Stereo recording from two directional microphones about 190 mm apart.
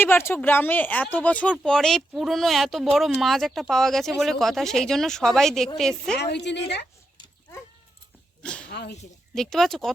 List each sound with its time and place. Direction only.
0.0 s speech: 10° left (ahead or behind)
6.1 s a woman's voice: 65° left (ahead or behind)
8.4 s speech: 5° left (ahead or behind)
8.7 s speech: 60° left (ahead or behind)
9.3 s speech: centre (ahead or behind)